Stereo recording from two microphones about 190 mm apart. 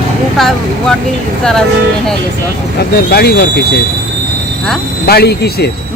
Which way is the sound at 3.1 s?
55° left (ahead or behind).